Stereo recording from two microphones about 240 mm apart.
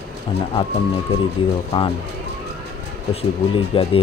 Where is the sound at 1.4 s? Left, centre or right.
Left.